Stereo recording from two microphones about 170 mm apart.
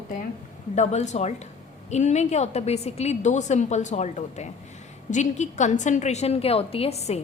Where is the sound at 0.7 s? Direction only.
45° left (ahead or behind).